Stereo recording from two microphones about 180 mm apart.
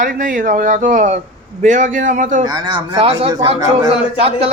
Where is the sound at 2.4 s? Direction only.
25° right (ahead or behind).